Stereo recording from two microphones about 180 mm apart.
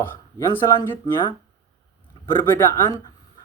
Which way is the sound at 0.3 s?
15° left (ahead or behind).